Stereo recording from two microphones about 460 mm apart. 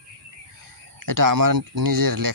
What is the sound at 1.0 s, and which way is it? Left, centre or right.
A man's voice, right.